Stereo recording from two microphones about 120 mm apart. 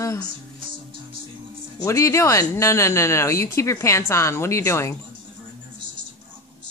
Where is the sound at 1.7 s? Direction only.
25° left (ahead or behind).